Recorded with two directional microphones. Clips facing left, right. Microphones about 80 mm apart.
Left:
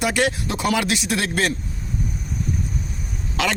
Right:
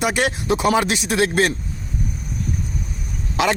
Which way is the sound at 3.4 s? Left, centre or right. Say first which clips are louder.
Right 4 dB; right.